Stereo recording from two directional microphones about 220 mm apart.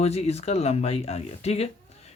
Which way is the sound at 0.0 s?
30° left (ahead or behind).